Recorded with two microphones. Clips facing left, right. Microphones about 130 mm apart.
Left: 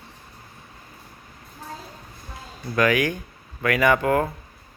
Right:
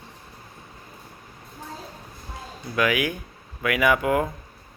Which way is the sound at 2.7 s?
5° right (ahead or behind).